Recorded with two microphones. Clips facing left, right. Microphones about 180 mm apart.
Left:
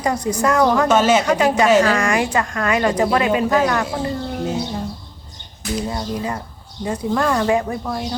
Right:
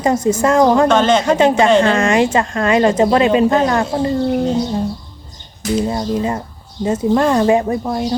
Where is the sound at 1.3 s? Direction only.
25° right (ahead or behind).